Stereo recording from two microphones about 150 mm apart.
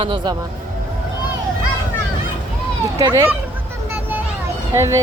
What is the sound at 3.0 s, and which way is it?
Speech, 20° right (ahead or behind).